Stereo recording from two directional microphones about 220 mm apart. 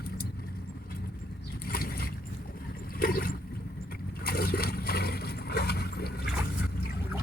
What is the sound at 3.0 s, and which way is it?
Water, 40° left (ahead or behind).